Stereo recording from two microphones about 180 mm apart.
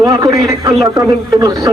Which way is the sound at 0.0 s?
20° right (ahead or behind).